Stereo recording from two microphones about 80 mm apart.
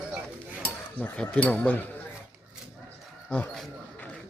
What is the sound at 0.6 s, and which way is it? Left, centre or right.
Cutlery, centre.